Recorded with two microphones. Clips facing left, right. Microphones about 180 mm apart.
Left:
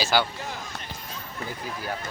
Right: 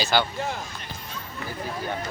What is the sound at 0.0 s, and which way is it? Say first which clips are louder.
Speech: even; 10° left (ahead or behind).